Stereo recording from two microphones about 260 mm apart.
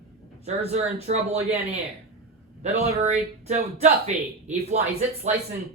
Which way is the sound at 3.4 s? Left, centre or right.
Right.